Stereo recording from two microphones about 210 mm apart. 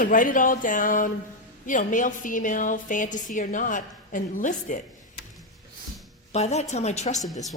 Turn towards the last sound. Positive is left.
turn(degrees=35)  # may be behind; listen again after turning